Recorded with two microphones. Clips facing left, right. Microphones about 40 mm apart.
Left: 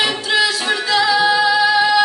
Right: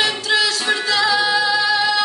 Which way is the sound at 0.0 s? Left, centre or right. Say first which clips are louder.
Left 1 dB; centre.